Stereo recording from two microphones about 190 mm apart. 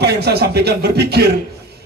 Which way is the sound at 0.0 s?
60° right (ahead or behind).